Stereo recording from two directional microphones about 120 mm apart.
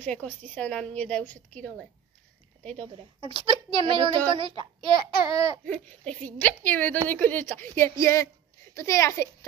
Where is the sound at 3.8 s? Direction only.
45° right (ahead or behind).